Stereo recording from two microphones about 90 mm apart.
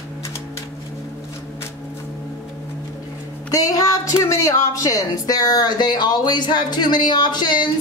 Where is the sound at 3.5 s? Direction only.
40° left (ahead or behind).